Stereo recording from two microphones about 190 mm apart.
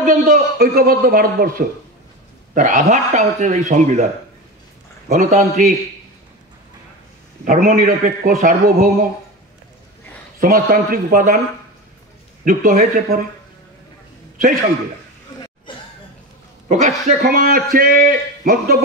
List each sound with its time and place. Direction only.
0.0 s a man's voice: 45° right (ahead or behind)
5.0 s a man's voice: 35° right (ahead or behind)
7.4 s a man's voice: 45° right (ahead or behind)
10.4 s a man's voice: 50° right (ahead or behind)
12.4 s a man's voice: 45° right (ahead or behind)
15.7 s a sound: 25° left (ahead or behind)
16.6 s a man's voice: 40° right (ahead or behind)